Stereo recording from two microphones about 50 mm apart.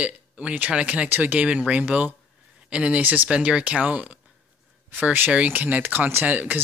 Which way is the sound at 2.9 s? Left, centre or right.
Right.